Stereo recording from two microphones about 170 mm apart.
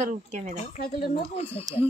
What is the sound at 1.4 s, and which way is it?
Speech, 35° left (ahead or behind).